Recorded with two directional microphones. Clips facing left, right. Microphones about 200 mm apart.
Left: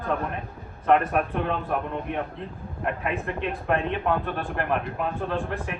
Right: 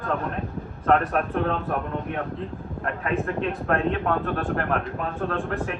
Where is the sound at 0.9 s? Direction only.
5° left (ahead or behind).